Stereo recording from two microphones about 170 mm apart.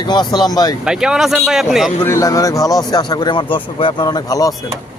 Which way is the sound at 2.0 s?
20° left (ahead or behind).